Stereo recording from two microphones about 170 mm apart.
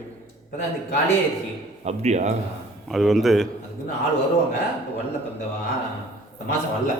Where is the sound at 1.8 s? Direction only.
40° right (ahead or behind).